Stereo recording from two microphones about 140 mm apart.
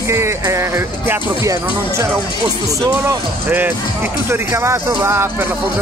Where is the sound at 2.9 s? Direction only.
15° right (ahead or behind).